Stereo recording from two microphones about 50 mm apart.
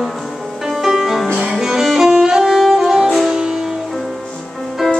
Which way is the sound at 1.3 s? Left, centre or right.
Centre.